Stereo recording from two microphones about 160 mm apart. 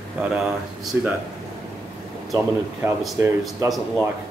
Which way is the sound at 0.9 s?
10° right (ahead or behind).